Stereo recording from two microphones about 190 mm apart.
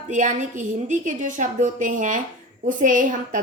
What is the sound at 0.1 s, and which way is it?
A woman's voice, 40° right (ahead or behind).